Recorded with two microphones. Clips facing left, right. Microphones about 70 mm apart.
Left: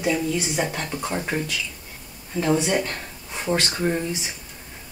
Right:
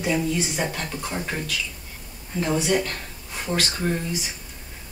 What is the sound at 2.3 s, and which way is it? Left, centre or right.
Speech, left.